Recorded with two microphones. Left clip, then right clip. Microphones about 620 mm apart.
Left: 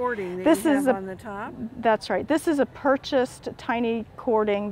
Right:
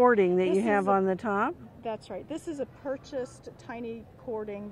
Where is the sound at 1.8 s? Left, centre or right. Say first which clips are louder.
Left 14 dB; left.